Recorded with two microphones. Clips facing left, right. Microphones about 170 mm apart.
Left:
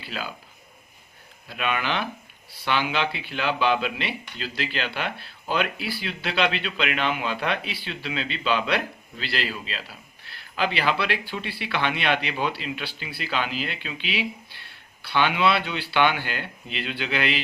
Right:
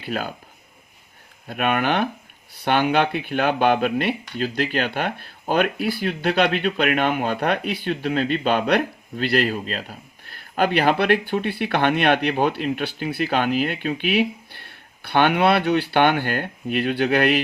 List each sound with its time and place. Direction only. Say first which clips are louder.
0.0 s speech: right 7 dB; 50° right (ahead or behind)
1.5 s speech: right 6 dB; 55° right (ahead or behind)